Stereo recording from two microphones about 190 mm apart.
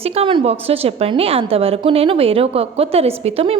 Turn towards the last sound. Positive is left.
turn(degrees=-30)  # may be behind; listen again after turning